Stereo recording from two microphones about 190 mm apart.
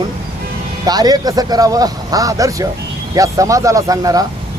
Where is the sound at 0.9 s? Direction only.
20° right (ahead or behind).